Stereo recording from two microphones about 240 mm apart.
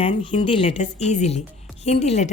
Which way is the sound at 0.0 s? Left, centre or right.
Left.